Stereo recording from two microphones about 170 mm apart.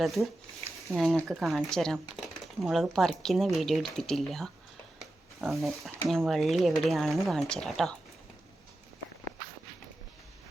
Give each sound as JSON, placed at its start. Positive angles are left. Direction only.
{"t": 0.0, "sound": "speech", "side_deg": 0}